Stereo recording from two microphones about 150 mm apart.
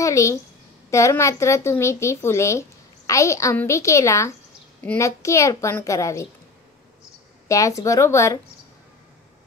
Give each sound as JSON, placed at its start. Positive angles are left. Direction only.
{"t": 0.0, "sound": "a woman's voice", "side_deg": 20}
{"t": 7.4, "sound": "a woman's voice", "side_deg": 20}